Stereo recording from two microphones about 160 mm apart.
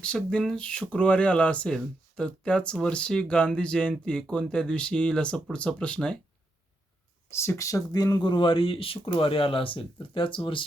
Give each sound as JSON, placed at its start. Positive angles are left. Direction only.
{"t": 0.0, "sound": "speech", "side_deg": 5}
{"t": 7.3, "sound": "speech", "side_deg": 15}